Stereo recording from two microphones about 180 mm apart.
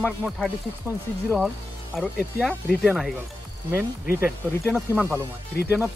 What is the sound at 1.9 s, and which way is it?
Speech, 5° left (ahead or behind).